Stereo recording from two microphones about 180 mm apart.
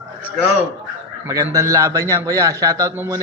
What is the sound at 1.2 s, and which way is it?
A man's voice, 20° right (ahead or behind).